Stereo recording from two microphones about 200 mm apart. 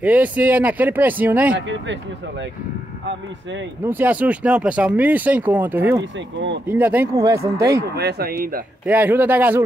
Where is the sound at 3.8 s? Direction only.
10° right (ahead or behind).